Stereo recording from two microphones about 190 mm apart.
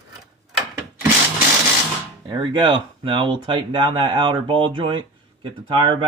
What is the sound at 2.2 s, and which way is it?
Speech, 25° right (ahead or behind).